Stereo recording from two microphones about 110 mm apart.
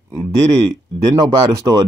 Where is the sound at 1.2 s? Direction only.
35° right (ahead or behind).